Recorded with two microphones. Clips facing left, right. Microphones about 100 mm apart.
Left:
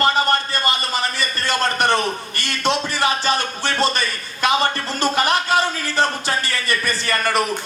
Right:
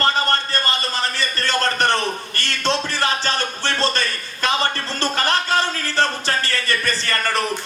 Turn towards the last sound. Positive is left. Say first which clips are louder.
# left 2 dB
turn(degrees=15)  # may be behind; listen again after turning